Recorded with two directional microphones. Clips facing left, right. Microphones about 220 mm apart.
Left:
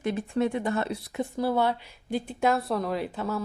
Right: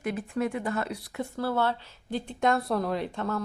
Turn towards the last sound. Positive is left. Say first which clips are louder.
# even
turn(degrees=5)  # may be behind; listen again after turning